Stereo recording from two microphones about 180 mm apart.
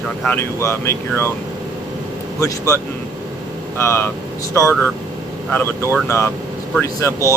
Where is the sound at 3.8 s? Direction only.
15° left (ahead or behind).